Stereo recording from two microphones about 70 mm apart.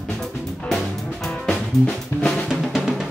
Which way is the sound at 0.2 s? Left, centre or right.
Centre.